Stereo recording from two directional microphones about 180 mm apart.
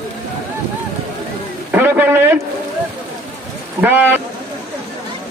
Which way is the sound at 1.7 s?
10° right (ahead or behind).